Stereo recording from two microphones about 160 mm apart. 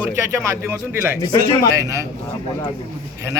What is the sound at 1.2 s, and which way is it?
Speech, 30° left (ahead or behind).